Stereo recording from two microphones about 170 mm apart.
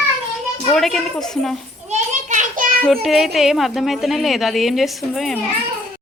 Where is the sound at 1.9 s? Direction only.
45° right (ahead or behind).